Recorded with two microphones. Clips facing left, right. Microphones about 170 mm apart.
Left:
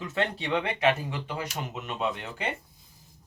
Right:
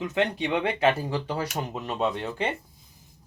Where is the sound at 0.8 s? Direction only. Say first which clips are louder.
Right 2 dB; 35° right (ahead or behind).